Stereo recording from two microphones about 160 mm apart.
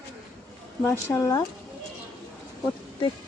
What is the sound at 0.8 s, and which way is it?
Speech, 15° left (ahead or behind).